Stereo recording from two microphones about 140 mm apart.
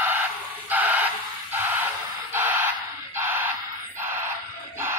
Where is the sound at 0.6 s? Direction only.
10° right (ahead or behind).